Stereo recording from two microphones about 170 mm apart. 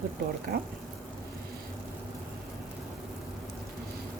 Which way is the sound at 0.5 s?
65° right (ahead or behind).